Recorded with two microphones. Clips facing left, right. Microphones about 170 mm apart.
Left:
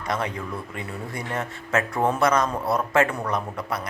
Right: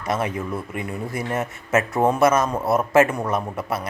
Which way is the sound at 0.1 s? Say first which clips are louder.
Right 4 dB; 20° right (ahead or behind).